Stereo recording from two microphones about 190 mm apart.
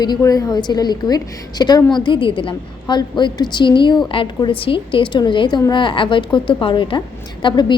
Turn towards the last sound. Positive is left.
turn(degrees=25)  # may be behind; listen again after turning